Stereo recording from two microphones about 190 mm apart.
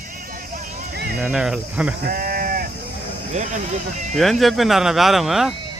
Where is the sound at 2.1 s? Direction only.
50° right (ahead or behind).